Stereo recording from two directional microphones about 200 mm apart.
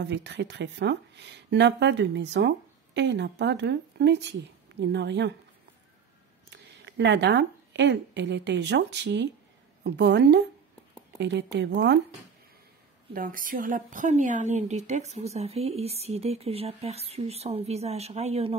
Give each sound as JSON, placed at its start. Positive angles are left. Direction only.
{"t": 0.0, "sound": "speech", "side_deg": -60}
{"t": 6.5, "sound": "speech", "side_deg": -60}
{"t": 13.1, "sound": "a woman's voice", "side_deg": -45}